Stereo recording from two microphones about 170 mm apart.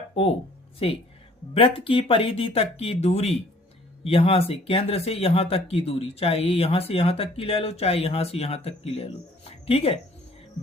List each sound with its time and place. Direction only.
0.8 s speech: 35° left (ahead or behind)